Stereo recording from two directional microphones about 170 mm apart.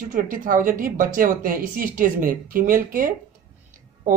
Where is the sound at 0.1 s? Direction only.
50° right (ahead or behind).